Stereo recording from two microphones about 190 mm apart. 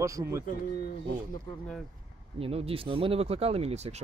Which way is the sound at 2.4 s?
30° right (ahead or behind).